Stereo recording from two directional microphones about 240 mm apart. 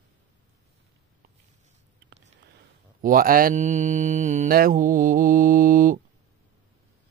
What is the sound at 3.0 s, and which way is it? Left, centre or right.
Speech, right.